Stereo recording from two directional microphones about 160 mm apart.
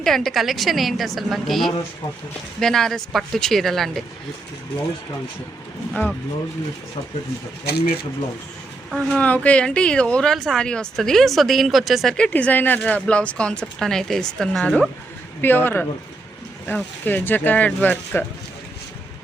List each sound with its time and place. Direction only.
0.0 s speech: centre (ahead or behind)
5.9 s speech: 10° left (ahead or behind)
7.6 s speech: 90° left
8.9 s speech: centre (ahead or behind)